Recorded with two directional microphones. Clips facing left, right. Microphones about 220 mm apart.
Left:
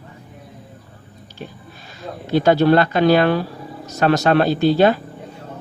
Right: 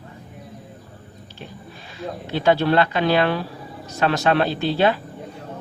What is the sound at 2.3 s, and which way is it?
Speech, 40° left (ahead or behind).